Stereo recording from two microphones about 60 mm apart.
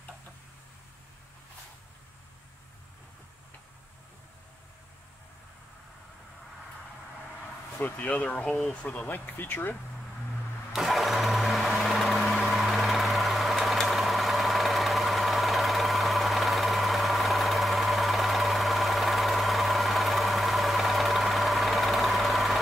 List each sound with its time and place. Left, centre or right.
7.8 s speech: left
10.7 s vehicle: centre